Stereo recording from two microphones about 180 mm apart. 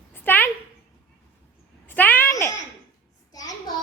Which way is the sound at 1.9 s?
10° left (ahead or behind).